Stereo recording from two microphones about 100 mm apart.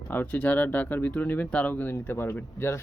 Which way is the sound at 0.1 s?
15° left (ahead or behind).